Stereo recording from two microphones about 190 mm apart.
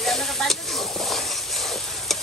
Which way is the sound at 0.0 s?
Centre (ahead or behind).